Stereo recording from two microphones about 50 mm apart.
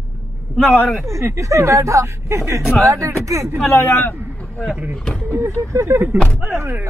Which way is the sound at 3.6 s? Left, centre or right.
Left.